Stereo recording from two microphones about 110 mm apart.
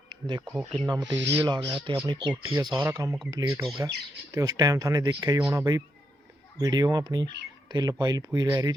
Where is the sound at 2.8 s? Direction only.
20° right (ahead or behind).